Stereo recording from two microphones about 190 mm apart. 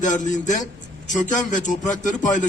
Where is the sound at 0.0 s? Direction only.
40° left (ahead or behind).